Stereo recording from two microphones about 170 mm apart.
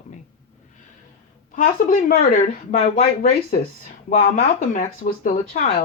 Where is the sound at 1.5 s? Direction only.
50° left (ahead or behind).